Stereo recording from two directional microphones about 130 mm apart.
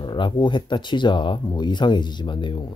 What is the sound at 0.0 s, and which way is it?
Speech, 35° left (ahead or behind).